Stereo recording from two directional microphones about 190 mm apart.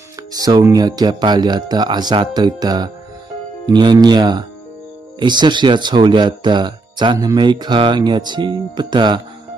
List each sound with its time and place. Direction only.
0.3 s speech: 20° right (ahead or behind)